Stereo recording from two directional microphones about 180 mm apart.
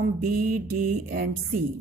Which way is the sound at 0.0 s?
55° right (ahead or behind).